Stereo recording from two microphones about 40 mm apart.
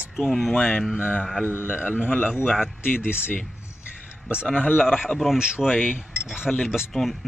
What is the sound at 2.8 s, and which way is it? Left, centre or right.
Speech, left.